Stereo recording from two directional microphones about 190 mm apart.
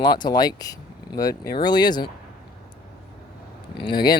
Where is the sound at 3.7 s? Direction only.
25° left (ahead or behind).